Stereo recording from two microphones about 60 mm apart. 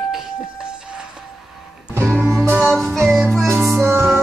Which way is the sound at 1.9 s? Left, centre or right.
Right.